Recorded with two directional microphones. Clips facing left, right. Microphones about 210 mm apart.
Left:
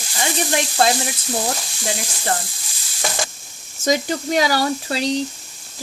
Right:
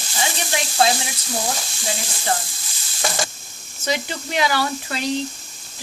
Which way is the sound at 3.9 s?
40° left (ahead or behind).